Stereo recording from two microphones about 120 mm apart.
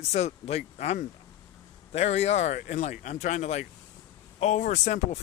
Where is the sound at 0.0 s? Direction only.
65° left (ahead or behind).